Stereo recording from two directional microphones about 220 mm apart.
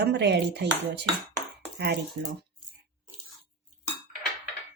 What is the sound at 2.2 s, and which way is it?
Speech, 65° right (ahead or behind).